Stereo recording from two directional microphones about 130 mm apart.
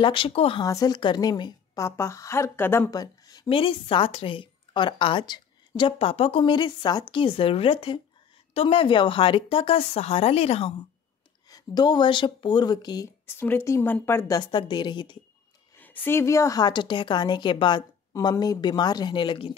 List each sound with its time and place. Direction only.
0.0 s a woman's voice: 40° left (ahead or behind)
0.7 s a woman's voice: 30° left (ahead or behind)
1.8 s a woman's voice: 20° left (ahead or behind)
2.9 s a sound: 30° left (ahead or behind)
3.4 s a woman's voice: 40° left (ahead or behind)
11.4 s a woman's voice: 30° left (ahead or behind)
13.3 s a woman's voice: 15° left (ahead or behind)
14.5 s a woman's voice: 35° left (ahead or behind)
15.8 s a woman's voice: 15° left (ahead or behind); by 19.5 s 40° left (ahead or behind)